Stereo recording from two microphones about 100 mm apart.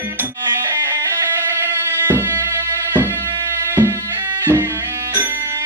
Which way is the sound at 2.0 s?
20° right (ahead or behind).